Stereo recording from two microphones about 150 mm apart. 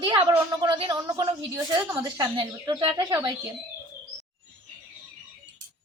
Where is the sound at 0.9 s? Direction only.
25° right (ahead or behind).